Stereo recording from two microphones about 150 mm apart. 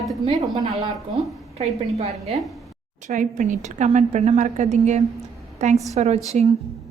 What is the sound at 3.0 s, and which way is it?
A woman's voice, 55° right (ahead or behind).